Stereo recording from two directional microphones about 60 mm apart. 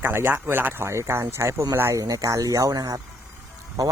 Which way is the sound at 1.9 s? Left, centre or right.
Right.